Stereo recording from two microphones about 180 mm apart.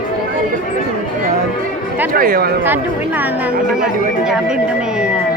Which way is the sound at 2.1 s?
55° right (ahead or behind).